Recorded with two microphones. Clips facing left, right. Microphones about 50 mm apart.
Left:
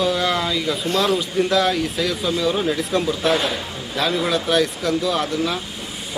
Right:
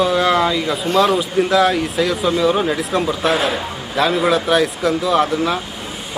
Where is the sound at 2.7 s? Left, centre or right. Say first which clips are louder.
Right 2 dB; centre.